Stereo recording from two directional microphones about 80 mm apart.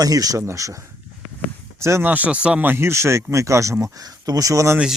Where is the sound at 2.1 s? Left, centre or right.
Centre; by 4.8 s right.